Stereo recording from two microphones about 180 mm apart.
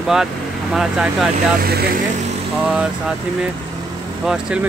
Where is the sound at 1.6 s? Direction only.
60° right (ahead or behind).